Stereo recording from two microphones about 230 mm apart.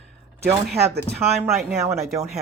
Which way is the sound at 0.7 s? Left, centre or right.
Right.